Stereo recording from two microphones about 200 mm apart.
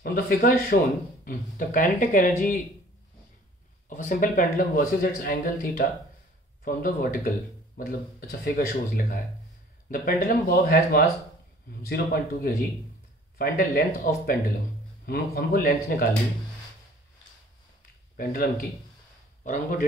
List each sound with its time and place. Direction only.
0.0 s speech: 50° left (ahead or behind)
3.9 s speech: 45° left (ahead or behind)
18.1 s speech: 45° left (ahead or behind)